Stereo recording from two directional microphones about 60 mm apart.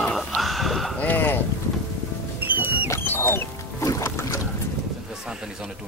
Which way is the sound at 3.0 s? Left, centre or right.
Left.